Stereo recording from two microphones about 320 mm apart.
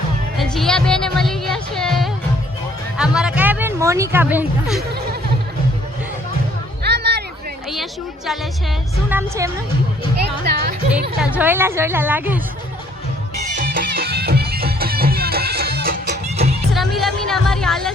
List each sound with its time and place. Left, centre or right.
0.3 s music: centre
3.0 s speech: centre
6.8 s music: right
9.0 s a woman's voice: centre
10.2 s speech: right
11.2 s a woman's voice: centre
13.7 s music: right
16.7 s music: centre